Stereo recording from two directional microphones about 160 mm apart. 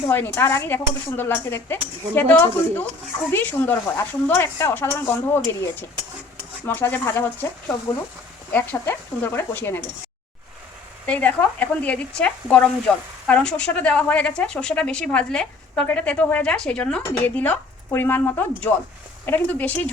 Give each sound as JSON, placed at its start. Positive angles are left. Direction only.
{"t": 0.1, "sound": "a woman's voice", "side_deg": 15}
{"t": 8.5, "sound": "a woman's voice", "side_deg": 15}
{"t": 11.0, "sound": "a woman's voice", "side_deg": 10}